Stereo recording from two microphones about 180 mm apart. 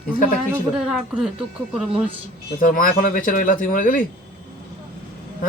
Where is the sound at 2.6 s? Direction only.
50° left (ahead or behind).